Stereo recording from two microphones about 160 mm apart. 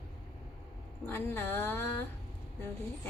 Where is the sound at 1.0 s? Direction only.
15° left (ahead or behind).